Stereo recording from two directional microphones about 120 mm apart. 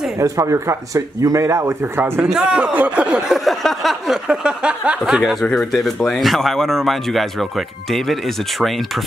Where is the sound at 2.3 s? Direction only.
5° right (ahead or behind).